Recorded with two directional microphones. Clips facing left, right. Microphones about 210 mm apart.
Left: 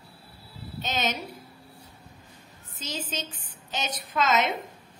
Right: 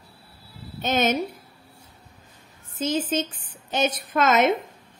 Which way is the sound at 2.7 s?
50° right (ahead or behind).